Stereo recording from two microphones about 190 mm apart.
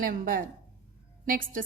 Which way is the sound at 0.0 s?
50° right (ahead or behind).